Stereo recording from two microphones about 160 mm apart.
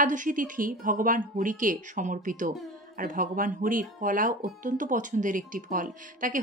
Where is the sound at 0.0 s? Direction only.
55° right (ahead or behind).